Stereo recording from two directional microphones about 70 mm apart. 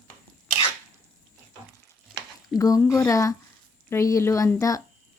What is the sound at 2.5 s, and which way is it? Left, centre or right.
Speech, left.